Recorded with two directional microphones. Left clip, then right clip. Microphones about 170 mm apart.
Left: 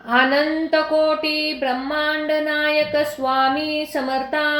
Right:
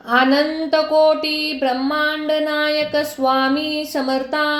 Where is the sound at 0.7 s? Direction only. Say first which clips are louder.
Right 5 dB; 35° right (ahead or behind).